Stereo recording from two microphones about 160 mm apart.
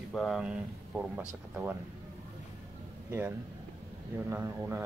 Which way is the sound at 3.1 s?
15° right (ahead or behind).